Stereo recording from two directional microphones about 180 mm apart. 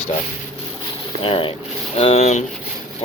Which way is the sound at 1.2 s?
30° left (ahead or behind).